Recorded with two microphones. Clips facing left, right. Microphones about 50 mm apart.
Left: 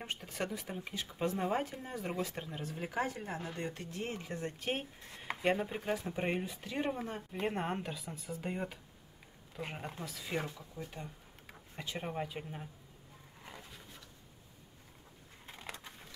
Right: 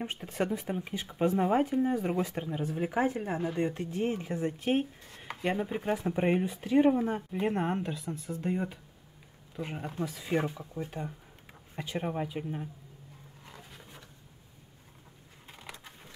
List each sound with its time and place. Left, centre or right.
0.0 s speech: right; by 5.8 s centre
5.9 s speech: centre
6.4 s speech: right
6.7 s speech: centre
7.0 s speech: centre
10.0 s speech: centre
11.4 s a sound: centre
12.0 s speech: centre
15.4 s crushing: centre